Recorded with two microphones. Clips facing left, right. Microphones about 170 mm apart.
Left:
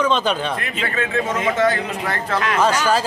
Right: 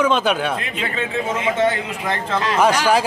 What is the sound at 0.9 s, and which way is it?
A man's voice, 20° right (ahead or behind).